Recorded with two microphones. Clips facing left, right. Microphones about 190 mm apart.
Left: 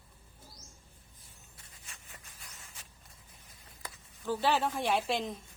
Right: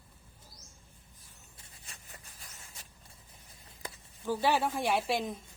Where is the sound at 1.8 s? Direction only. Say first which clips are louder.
Right 1 dB; 35° right (ahead or behind).